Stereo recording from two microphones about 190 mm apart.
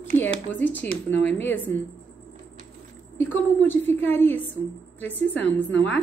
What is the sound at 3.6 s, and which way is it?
A woman's voice, 10° left (ahead or behind).